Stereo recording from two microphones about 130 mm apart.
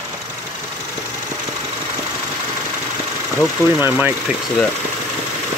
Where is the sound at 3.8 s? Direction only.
15° right (ahead or behind).